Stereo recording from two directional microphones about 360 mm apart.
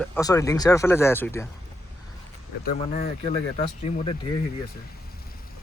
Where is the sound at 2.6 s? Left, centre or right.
Centre.